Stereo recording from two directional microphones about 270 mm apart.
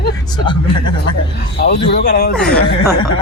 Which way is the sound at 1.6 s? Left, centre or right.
Left.